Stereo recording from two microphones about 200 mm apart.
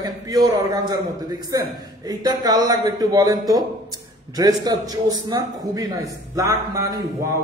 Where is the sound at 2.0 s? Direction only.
20° right (ahead or behind).